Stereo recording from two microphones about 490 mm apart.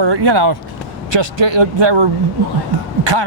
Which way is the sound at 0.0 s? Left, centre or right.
Right.